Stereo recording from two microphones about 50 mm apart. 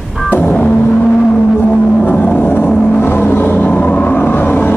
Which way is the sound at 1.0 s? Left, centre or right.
Left.